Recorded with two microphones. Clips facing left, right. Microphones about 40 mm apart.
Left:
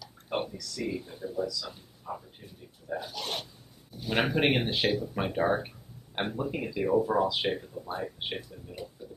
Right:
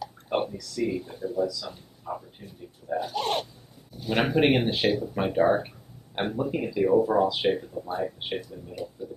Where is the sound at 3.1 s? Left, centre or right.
Right.